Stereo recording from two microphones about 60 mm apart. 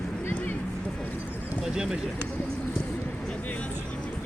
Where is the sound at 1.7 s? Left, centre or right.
Centre.